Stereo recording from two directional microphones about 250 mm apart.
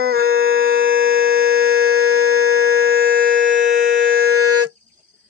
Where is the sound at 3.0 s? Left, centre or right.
Right.